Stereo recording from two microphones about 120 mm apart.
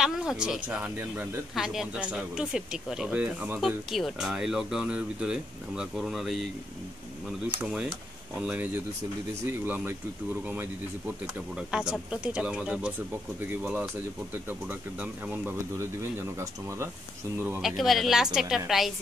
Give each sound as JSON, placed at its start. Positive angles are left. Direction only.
{"t": 0.0, "sound": "speech", "side_deg": -5}
{"t": 0.7, "sound": "speech", "side_deg": -15}
{"t": 1.5, "sound": "speech", "side_deg": -5}
{"t": 7.4, "sound": "speech", "side_deg": -10}
{"t": 17.6, "sound": "speech", "side_deg": 0}